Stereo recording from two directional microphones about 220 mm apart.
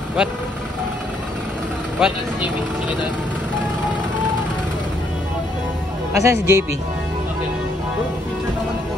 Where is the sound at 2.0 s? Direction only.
5° right (ahead or behind).